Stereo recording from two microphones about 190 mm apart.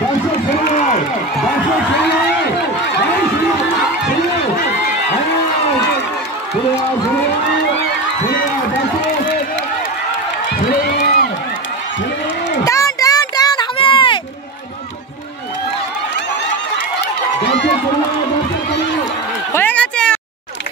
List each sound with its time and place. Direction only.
0.7 s crowd: 40° left (ahead or behind)
10.8 s crowd: 45° left (ahead or behind)
12.6 s a sound: 15° left (ahead or behind)
19.5 s run: 10° left (ahead or behind)